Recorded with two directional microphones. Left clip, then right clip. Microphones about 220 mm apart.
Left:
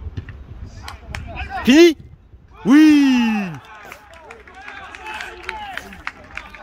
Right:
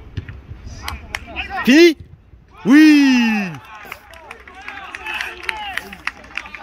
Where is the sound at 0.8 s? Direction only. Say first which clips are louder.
Right 6 dB; 25° left (ahead or behind).